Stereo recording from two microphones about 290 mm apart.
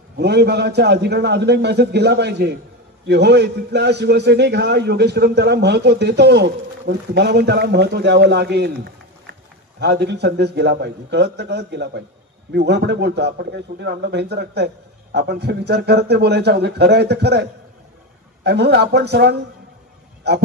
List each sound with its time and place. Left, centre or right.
0.2 s a man's voice: right